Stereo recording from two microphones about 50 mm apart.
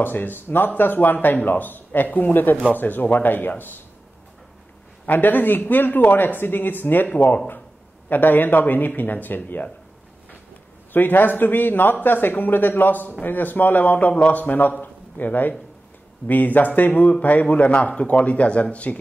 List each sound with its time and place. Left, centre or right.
0.0 s speech: left
5.0 s speech: left
8.1 s speech: left
10.9 s speech: left
14.8 s a sound: left
16.3 s speech: left